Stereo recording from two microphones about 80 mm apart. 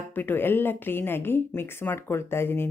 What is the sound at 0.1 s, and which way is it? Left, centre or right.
A woman's voice, left.